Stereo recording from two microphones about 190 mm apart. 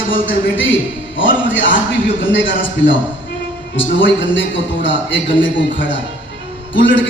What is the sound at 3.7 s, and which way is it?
A man's voice, 75° left (ahead or behind).